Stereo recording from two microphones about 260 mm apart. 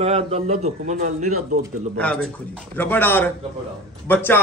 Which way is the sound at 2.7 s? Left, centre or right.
Centre.